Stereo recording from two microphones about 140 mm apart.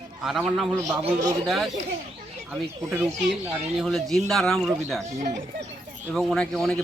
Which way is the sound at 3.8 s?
Centre (ahead or behind).